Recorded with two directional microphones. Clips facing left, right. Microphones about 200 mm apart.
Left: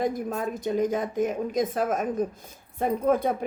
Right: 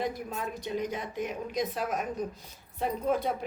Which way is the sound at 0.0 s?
45° left (ahead or behind).